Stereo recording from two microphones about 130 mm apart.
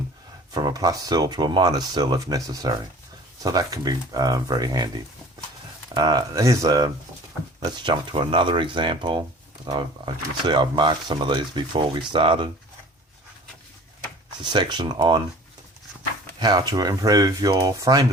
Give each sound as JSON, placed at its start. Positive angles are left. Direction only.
{"t": 0.5, "sound": "speech", "side_deg": -30}
{"t": 5.9, "sound": "speech", "side_deg": -30}
{"t": 14.4, "sound": "speech", "side_deg": -35}
{"t": 16.4, "sound": "speech", "side_deg": -30}